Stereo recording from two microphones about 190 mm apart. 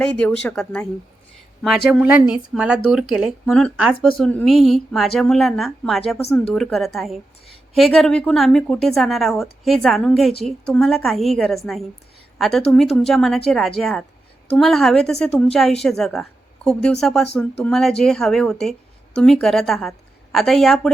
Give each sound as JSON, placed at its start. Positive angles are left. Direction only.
{"t": 0.0, "sound": "a woman's voice", "side_deg": 5}
{"t": 1.9, "sound": "a woman's voice", "side_deg": -5}
{"t": 7.4, "sound": "a sound", "side_deg": 30}
{"t": 7.8, "sound": "a woman's voice", "side_deg": 0}